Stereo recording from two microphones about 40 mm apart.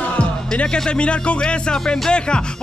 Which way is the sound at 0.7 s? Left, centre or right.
Left.